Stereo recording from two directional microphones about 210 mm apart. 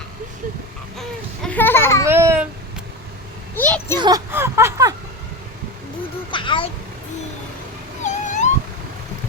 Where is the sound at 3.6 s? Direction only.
10° left (ahead or behind).